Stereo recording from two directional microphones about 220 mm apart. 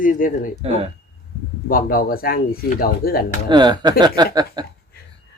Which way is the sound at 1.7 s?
40° left (ahead or behind).